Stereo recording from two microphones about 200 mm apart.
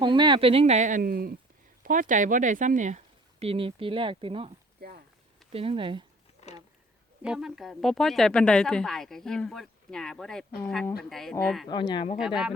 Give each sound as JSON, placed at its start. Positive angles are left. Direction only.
{"t": 0.0, "sound": "speech", "side_deg": -25}
{"t": 4.8, "sound": "a sound", "side_deg": -50}
{"t": 5.5, "sound": "speech", "side_deg": -30}
{"t": 7.2, "sound": "a woman's voice", "side_deg": -5}
{"t": 11.7, "sound": "speech", "side_deg": 20}
{"t": 12.2, "sound": "a woman's voice", "side_deg": -5}